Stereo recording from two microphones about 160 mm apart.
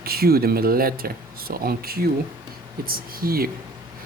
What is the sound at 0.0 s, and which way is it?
Speech, 70° right (ahead or behind).